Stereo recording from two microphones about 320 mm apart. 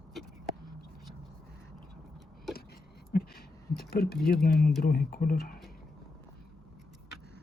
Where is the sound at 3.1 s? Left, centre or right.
Left.